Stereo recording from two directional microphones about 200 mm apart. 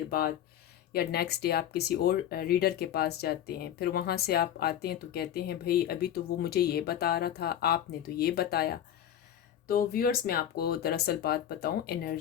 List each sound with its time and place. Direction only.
0.1 s speech: 50° left (ahead or behind)